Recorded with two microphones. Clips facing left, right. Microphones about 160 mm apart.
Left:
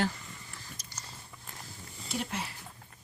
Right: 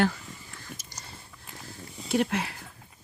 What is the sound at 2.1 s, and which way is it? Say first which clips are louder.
Speech: right 10 dB; 70° right (ahead or behind).